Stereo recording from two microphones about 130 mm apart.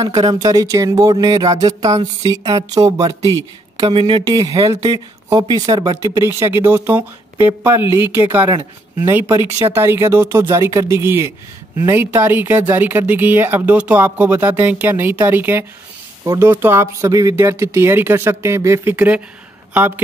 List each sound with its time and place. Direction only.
0.3 s speech: 25° right (ahead or behind)
6.1 s speech: 20° right (ahead or behind)